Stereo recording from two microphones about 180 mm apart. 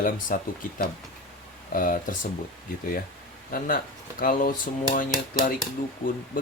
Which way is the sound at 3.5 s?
50° left (ahead or behind).